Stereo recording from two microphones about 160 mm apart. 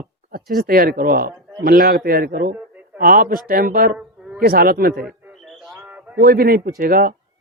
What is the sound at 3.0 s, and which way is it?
Speech, 65° right (ahead or behind).